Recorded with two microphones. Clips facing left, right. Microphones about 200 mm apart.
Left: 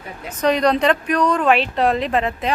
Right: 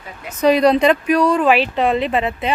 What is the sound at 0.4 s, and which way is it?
Speech, 10° right (ahead or behind).